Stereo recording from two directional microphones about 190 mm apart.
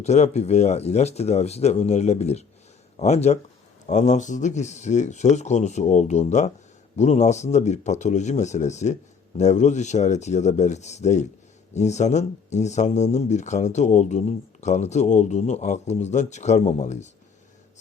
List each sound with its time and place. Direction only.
0.0 s speech: 35° left (ahead or behind)